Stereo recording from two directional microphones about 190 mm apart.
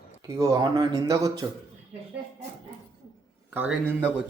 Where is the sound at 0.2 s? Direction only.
20° right (ahead or behind).